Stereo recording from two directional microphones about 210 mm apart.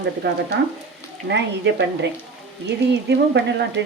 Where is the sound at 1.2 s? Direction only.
55° right (ahead or behind).